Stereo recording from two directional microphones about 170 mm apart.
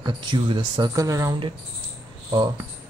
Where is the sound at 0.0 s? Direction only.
25° right (ahead or behind).